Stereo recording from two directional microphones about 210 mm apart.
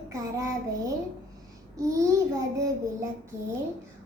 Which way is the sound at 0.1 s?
15° right (ahead or behind).